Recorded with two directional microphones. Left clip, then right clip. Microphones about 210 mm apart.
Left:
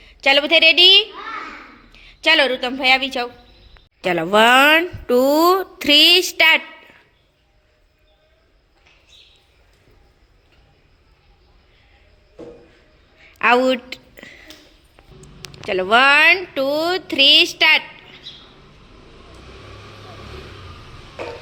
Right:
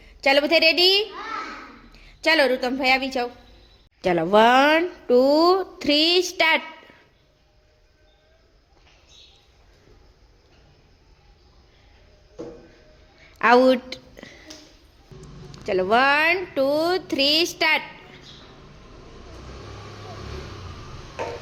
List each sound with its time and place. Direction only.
0.0 s a woman's voice: 10° right (ahead or behind)
13.2 s a sound: 15° right (ahead or behind)
15.6 s a woman's voice: centre (ahead or behind)